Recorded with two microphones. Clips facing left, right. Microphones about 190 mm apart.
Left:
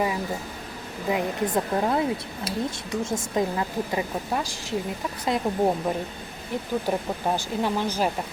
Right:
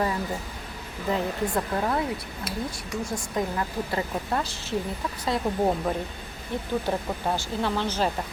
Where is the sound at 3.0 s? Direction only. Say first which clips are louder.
Left 3 dB; 25° left (ahead or behind).